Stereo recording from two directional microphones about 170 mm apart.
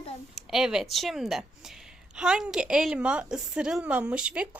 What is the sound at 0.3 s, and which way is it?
Speech, centre (ahead or behind).